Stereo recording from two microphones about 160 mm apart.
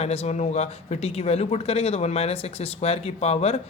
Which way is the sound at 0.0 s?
40° left (ahead or behind).